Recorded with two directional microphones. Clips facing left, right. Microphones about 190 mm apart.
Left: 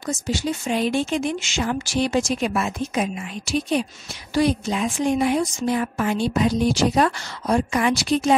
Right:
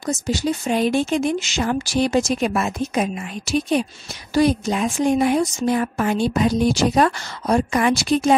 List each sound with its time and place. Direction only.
0.0 s a woman's voice: 40° right (ahead or behind)